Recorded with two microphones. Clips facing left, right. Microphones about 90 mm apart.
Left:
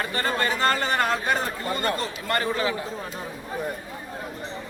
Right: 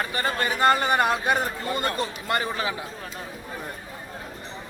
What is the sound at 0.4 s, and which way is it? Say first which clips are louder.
Livestock: right 5 dB; 15° right (ahead or behind).